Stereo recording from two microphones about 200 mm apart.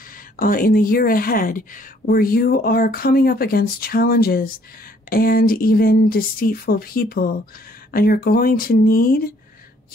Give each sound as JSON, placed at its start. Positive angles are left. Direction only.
{"t": 0.4, "sound": "speech", "side_deg": 45}